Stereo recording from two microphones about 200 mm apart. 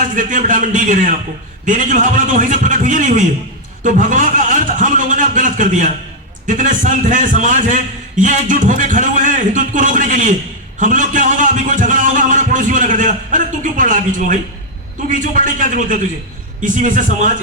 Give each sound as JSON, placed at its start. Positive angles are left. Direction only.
{"t": 0.1, "sound": "a man's voice", "side_deg": -40}